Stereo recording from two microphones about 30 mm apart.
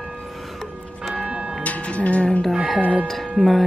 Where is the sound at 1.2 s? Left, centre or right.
Right.